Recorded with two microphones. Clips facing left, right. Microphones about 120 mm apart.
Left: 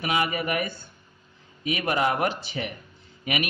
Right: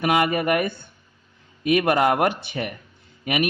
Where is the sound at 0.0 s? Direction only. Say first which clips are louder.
Right 6 dB; 55° right (ahead or behind).